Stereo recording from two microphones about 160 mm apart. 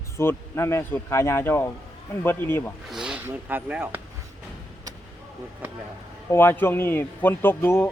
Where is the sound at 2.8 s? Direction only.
5° right (ahead or behind).